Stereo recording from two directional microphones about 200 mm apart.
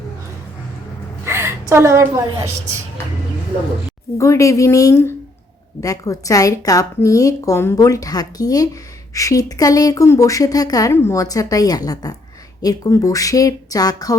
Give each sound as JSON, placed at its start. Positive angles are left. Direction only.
{"t": 1.2, "sound": "a woman's voice", "side_deg": -10}
{"t": 4.2, "sound": "a woman's voice", "side_deg": 15}